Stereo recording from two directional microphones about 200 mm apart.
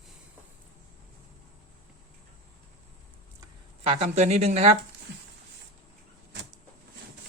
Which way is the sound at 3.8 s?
30° right (ahead or behind).